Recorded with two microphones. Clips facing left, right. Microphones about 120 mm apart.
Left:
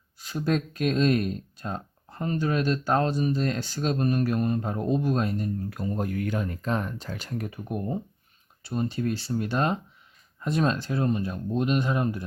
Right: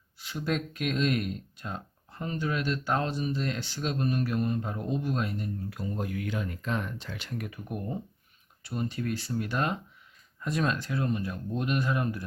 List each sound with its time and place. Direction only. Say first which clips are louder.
0.2 s speech: left 5 dB; 40° left (ahead or behind); by 12.2 s 25° left (ahead or behind)